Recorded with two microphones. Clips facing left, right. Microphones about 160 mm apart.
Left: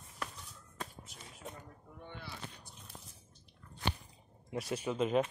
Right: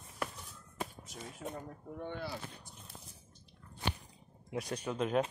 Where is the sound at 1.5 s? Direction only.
55° right (ahead or behind).